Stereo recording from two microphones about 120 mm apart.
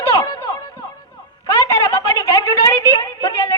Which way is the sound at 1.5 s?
25° left (ahead or behind).